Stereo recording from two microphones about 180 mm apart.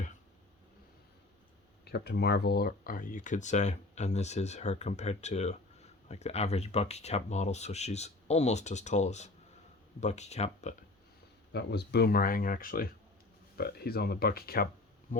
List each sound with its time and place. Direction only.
1.8 s speech: 65° left (ahead or behind); by 10.8 s 40° left (ahead or behind)
11.5 s speech: 65° left (ahead or behind); by 15.3 s 45° left (ahead or behind)